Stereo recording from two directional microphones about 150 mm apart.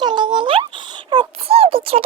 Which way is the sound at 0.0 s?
30° right (ahead or behind).